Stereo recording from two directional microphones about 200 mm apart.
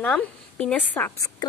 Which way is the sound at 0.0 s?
5° left (ahead or behind).